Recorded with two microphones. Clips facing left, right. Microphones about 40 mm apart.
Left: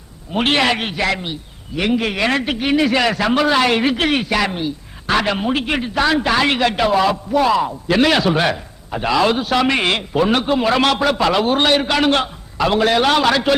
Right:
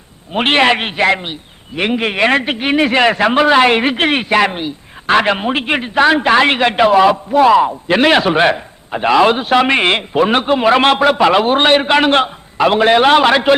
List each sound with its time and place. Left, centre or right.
0.3 s a man's voice: right